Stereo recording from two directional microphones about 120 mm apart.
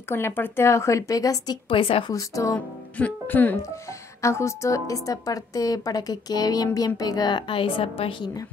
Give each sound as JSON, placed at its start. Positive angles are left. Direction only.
{"t": 0.1, "sound": "a woman's voice", "side_deg": 20}
{"t": 1.7, "sound": "a woman's voice", "side_deg": 50}
{"t": 2.1, "sound": "a woman's voice", "side_deg": 30}
{"t": 3.0, "sound": "a woman's voice", "side_deg": 15}